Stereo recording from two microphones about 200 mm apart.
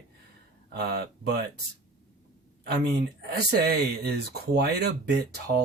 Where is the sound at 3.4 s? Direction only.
55° right (ahead or behind).